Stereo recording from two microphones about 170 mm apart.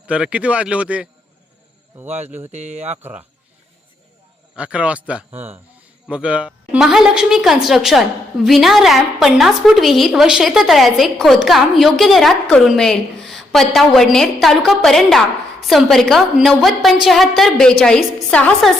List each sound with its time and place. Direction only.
0.1 s speech: 5° right (ahead or behind)
2.5 s speech: 40° right (ahead or behind)
3.0 s speech: 10° right (ahead or behind)
4.5 s a woman's voice: 5° right (ahead or behind)